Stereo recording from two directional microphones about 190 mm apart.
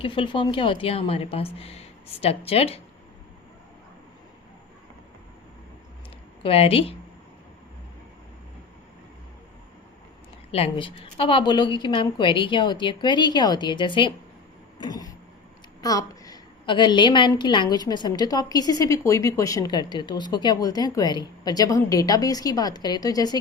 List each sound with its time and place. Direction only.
0.0 s a woman's voice: 25° left (ahead or behind)
6.4 s a woman's voice: 30° left (ahead or behind)
10.5 s a woman's voice: 30° left (ahead or behind)